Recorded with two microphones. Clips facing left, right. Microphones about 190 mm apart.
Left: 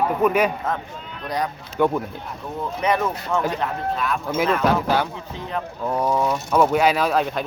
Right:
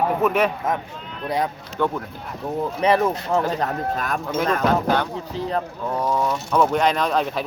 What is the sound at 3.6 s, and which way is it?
Speech, 45° right (ahead or behind).